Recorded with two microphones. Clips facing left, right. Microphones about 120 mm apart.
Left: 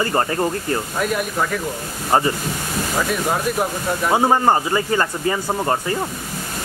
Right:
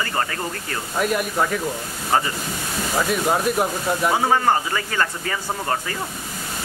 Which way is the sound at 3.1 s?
5° right (ahead or behind).